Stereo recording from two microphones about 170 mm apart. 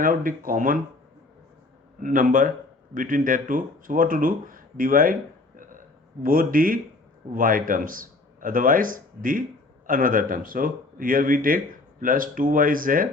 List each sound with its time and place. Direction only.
0.0 s speech: 55° right (ahead or behind)
2.0 s speech: 50° right (ahead or behind)
6.2 s a man's voice: 55° right (ahead or behind)